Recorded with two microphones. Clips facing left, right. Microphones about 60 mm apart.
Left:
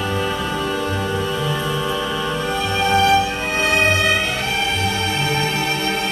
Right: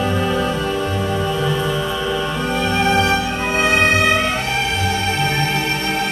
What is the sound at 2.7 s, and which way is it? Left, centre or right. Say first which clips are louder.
Music: left 3 dB; right.